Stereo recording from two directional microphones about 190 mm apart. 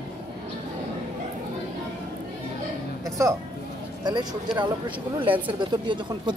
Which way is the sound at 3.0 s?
15° right (ahead or behind).